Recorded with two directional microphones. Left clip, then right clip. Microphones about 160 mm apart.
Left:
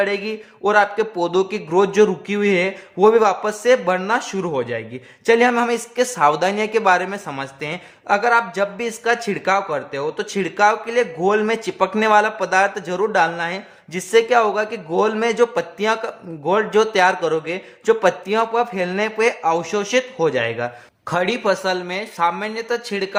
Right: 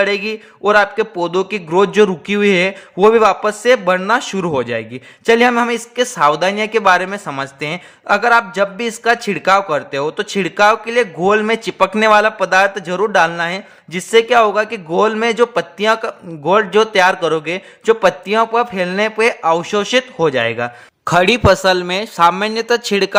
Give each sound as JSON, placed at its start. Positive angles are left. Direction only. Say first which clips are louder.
{"t": 0.0, "sound": "a man's voice", "louder": "right 5 dB", "side_deg": -25}
{"t": 21.0, "sound": "speech", "louder": "right 8 dB", "side_deg": -50}